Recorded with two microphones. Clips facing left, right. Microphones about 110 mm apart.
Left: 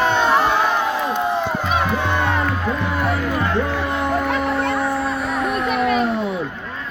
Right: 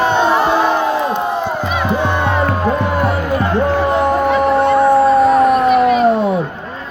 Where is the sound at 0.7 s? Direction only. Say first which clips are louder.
Right 5 dB; 35° right (ahead or behind).